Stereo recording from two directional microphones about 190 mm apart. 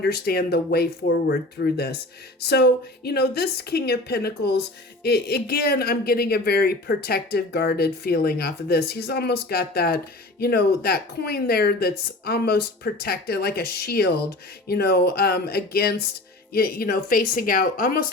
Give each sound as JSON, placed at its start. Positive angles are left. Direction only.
{"t": 0.0, "sound": "a woman's voice", "side_deg": 55}